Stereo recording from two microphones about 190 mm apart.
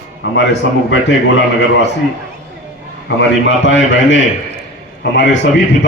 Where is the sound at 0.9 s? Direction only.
70° left (ahead or behind).